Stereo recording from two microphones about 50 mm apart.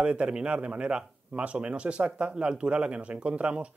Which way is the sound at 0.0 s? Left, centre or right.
Centre.